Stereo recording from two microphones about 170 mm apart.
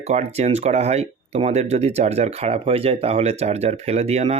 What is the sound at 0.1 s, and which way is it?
Speech, 40° right (ahead or behind).